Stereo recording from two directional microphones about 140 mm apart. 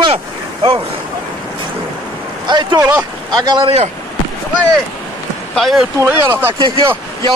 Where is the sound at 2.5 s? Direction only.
30° right (ahead or behind).